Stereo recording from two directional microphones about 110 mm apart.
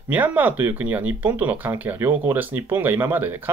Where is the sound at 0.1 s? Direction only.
15° right (ahead or behind).